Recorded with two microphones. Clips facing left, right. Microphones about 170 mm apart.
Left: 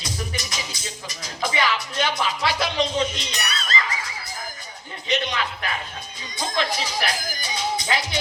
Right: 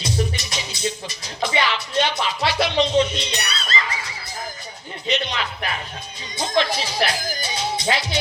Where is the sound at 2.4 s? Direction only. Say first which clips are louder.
Right 5 dB; 25° right (ahead or behind).